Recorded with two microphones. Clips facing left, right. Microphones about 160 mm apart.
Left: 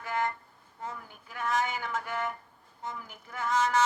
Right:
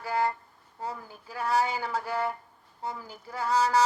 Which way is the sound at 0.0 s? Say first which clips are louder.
Right 4 dB; 35° right (ahead or behind).